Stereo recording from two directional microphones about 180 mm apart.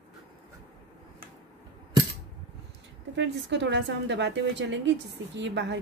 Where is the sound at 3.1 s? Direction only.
75° right (ahead or behind).